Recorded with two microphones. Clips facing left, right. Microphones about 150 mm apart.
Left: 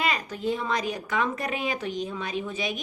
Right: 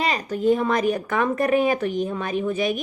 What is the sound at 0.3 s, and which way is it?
A woman's voice, 50° right (ahead or behind).